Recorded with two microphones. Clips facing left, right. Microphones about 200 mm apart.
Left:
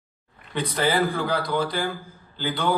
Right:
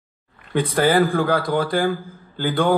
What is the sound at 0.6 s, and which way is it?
Speech, 50° right (ahead or behind).